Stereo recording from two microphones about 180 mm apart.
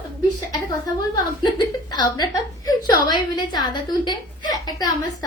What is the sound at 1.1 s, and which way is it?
A woman's voice, 20° left (ahead or behind).